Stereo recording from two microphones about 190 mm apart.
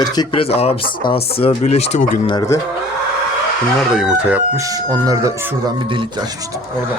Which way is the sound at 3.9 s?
Centre (ahead or behind).